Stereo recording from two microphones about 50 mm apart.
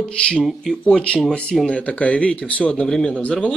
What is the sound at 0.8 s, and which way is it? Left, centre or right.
Speech, left.